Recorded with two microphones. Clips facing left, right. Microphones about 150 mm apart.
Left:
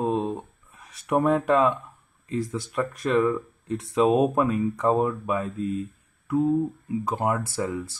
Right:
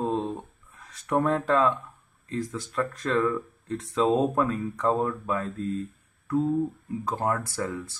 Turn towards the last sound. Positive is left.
turn(degrees=20)  # may be behind; listen again after turning